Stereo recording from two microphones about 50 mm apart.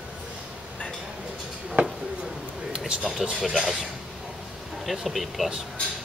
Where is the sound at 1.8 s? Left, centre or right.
Right.